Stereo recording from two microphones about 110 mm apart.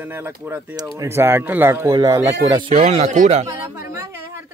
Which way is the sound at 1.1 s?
20° right (ahead or behind).